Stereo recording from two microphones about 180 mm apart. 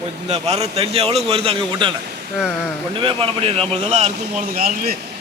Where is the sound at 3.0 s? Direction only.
30° right (ahead or behind).